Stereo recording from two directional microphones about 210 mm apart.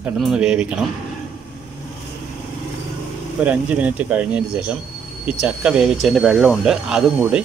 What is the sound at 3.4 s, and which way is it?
Speech, 5° right (ahead or behind).